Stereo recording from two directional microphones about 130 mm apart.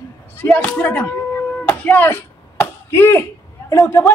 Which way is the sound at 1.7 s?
15° left (ahead or behind).